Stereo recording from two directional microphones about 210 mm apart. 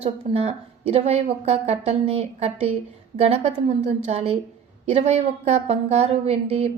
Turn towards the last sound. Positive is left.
turn(degrees=-30)  # may be behind; listen again after turning